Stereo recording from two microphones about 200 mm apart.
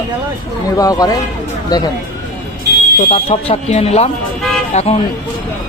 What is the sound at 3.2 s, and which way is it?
Speech, 30° left (ahead or behind).